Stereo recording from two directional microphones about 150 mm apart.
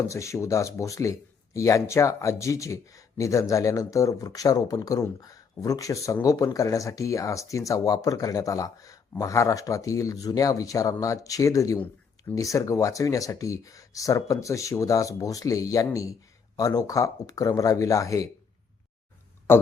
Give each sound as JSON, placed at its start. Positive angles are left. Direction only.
{"t": 0.1, "sound": "speech", "side_deg": 20}
{"t": 19.5, "sound": "speech", "side_deg": 15}